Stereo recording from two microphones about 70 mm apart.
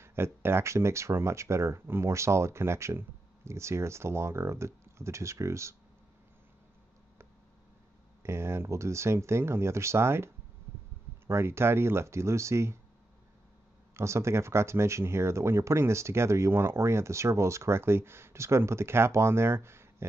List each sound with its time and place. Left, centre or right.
0.0 s speech: right
8.2 s speech: right
13.9 s speech: right